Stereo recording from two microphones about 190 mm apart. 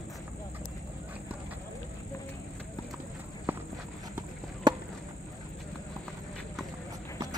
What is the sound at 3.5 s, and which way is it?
Walk, 10° right (ahead or behind).